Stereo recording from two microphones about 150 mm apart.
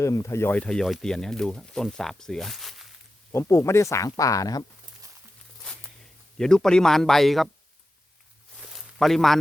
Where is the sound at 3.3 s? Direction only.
20° left (ahead or behind).